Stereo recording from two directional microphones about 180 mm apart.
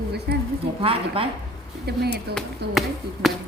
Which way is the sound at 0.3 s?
65° right (ahead or behind).